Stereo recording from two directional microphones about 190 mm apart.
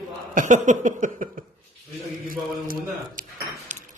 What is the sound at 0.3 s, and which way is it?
Speech, 40° right (ahead or behind).